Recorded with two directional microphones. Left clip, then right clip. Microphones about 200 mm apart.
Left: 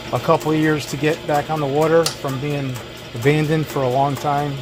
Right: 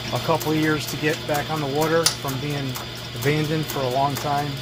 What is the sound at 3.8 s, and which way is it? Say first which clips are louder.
Speech: left 5 dB; 65° left (ahead or behind).